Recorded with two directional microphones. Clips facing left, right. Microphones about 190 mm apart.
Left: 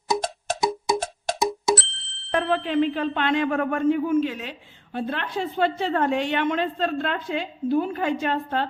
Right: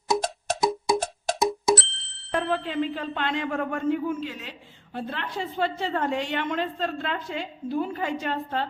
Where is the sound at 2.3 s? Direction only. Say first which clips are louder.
Left 4 dB; 70° left (ahead or behind).